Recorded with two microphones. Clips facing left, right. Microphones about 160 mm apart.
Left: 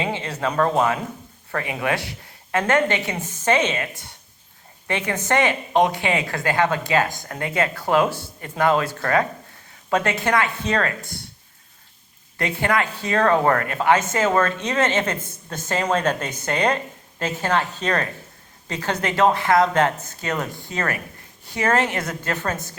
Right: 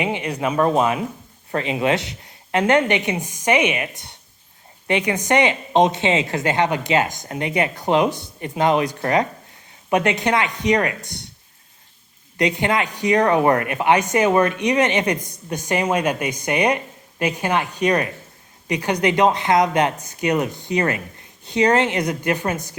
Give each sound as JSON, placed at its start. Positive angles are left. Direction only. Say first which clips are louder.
{"t": 0.0, "sound": "a woman's voice", "louder": "right 2 dB", "side_deg": -15}
{"t": 12.4, "sound": "speech", "louder": "right 2 dB", "side_deg": -20}